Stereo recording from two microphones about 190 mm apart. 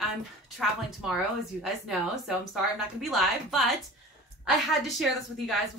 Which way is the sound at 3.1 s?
Centre (ahead or behind).